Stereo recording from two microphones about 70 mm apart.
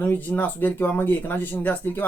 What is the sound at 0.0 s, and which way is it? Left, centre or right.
Speech, left.